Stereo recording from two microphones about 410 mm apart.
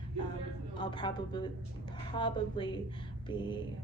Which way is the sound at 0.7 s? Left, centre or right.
Centre.